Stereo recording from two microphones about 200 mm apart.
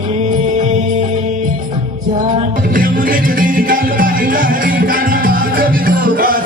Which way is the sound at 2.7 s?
45° right (ahead or behind).